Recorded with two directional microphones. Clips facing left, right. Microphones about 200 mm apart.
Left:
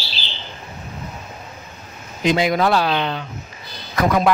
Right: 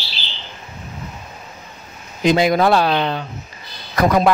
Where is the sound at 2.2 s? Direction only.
40° right (ahead or behind).